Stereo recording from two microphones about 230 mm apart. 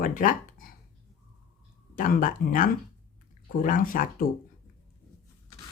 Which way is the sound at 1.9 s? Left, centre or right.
Left.